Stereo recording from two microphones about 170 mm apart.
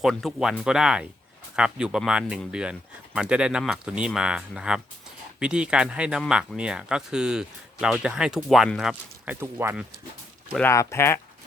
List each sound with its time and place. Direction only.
0.0 s speech: centre (ahead or behind)
10.7 s speech: 15° left (ahead or behind)